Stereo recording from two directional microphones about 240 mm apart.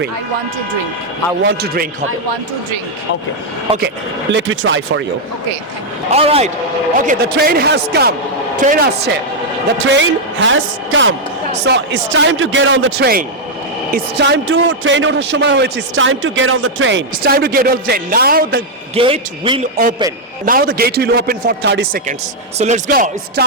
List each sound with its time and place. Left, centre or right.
1.5 s a man's voice: right
3.8 s a man's voice: right
6.1 s a man's voice: right
7.1 s a man's voice: right
16.9 s a man's voice: right
18.9 s a man's voice: right
20.4 s a man's voice: right